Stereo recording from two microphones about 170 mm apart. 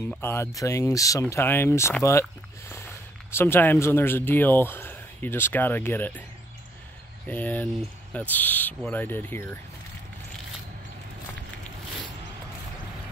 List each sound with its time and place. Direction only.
0.2 s speech: 15° left (ahead or behind)
7.2 s speech: 10° left (ahead or behind)